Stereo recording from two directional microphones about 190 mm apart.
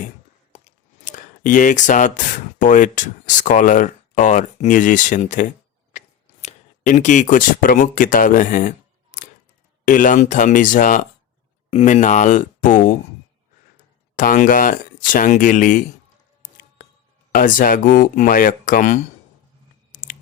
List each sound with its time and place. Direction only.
1.1 s speech: 45° left (ahead or behind)
5.9 s a sound: 40° left (ahead or behind)
6.4 s speech: 40° left (ahead or behind)
9.8 s speech: 45° left (ahead or behind)
14.2 s speech: 45° left (ahead or behind)
17.3 s speech: 45° left (ahead or behind)
19.9 s a sound: 45° left (ahead or behind)